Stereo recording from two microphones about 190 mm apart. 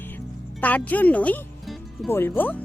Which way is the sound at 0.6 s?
10° left (ahead or behind).